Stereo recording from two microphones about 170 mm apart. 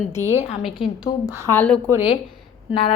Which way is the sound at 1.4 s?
10° left (ahead or behind).